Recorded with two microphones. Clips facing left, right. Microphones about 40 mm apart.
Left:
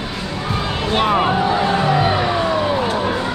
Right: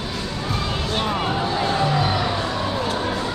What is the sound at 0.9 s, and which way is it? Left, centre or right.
Music, left.